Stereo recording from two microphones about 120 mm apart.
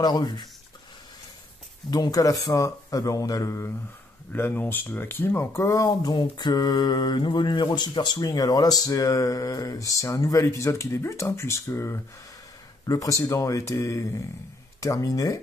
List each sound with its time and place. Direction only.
0.0 s speech: 35° left (ahead or behind)
1.9 s speech: 30° left (ahead or behind)